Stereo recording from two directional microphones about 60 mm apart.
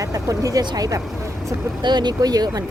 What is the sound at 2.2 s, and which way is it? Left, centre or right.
Speech, right.